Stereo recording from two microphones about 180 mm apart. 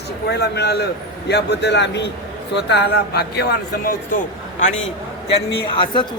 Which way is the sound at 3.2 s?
65° left (ahead or behind).